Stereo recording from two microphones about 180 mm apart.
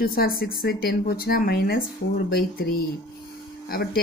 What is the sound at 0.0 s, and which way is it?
Speech, 55° left (ahead or behind).